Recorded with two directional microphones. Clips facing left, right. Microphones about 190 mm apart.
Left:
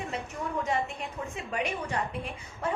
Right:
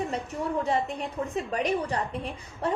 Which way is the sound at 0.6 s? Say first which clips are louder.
Right 2 dB; 35° right (ahead or behind).